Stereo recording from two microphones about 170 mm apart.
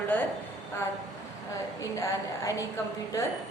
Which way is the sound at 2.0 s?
20° left (ahead or behind).